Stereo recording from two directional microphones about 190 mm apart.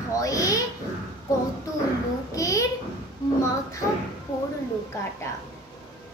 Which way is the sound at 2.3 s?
15° left (ahead or behind).